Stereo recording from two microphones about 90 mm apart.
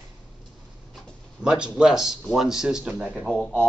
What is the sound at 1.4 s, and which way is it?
A man's voice, 10° right (ahead or behind).